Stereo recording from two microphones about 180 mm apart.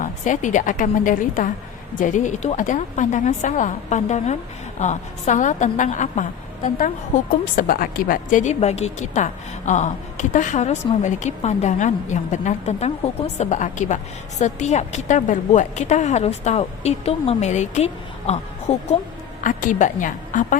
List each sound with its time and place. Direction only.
0.0 s a woman's voice: 45° left (ahead or behind)